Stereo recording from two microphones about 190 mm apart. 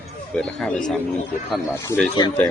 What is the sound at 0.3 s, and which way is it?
Speech, 5° left (ahead or behind).